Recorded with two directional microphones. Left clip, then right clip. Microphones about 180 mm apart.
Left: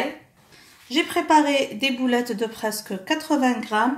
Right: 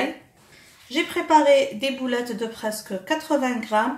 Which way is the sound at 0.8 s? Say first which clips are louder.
Left 2 dB; 30° left (ahead or behind).